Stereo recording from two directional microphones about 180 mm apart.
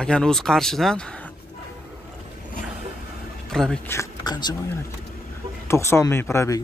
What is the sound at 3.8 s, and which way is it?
Speech, 20° left (ahead or behind).